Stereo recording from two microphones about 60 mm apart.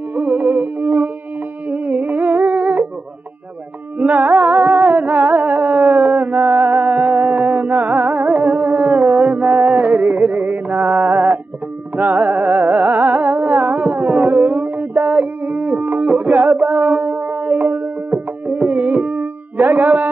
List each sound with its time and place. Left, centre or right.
0.1 s music: right
1.7 s humming: right
4.0 s music: right
7.2 s a sound: right
8.0 s music: right
12.6 s music: right
13.0 s music: right